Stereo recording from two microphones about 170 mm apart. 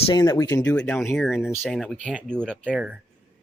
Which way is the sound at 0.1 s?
20° left (ahead or behind).